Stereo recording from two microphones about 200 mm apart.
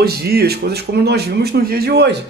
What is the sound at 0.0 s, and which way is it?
Speech, 50° right (ahead or behind).